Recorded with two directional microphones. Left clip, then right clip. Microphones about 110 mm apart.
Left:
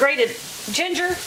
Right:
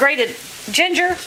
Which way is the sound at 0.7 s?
35° right (ahead or behind).